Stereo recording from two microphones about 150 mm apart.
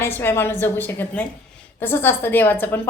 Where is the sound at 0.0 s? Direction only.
15° left (ahead or behind).